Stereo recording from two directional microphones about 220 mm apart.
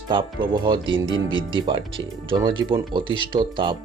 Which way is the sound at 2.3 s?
20° right (ahead or behind).